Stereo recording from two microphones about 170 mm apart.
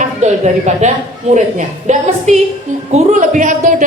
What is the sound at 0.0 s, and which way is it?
A woman's voice, 45° right (ahead or behind).